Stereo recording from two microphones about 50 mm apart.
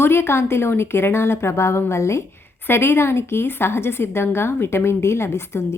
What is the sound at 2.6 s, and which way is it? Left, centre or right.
A woman's voice, left.